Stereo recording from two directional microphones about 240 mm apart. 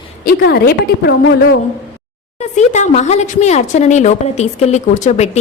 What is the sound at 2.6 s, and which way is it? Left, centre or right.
A woman's voice, left.